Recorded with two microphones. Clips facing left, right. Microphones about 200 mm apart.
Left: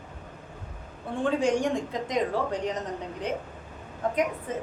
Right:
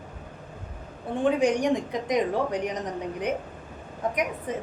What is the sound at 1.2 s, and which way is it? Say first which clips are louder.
Speech: right 2 dB; 15° right (ahead or behind).